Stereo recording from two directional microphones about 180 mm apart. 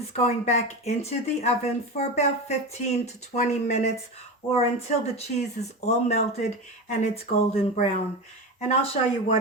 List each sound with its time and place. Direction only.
0.1 s speech: 35° left (ahead or behind)